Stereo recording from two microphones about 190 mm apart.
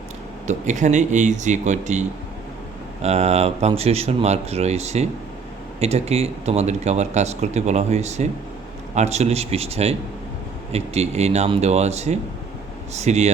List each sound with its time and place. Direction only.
0.4 s speech: 40° right (ahead or behind)